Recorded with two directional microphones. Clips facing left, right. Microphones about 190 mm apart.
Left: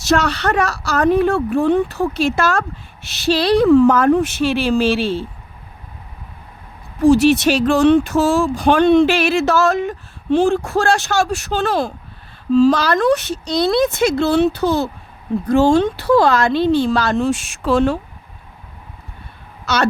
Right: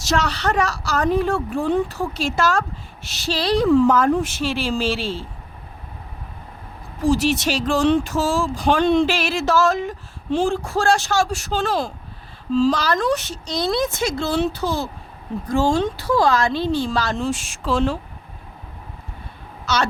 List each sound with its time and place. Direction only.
0.0 s a woman's voice: 60° left (ahead or behind)
7.0 s a woman's voice: 65° left (ahead or behind)
19.6 s speech: 60° left (ahead or behind)